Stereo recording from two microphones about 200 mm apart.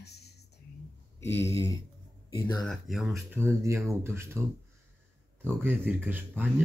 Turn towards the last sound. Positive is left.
turn(degrees=-10)  # may be behind; listen again after turning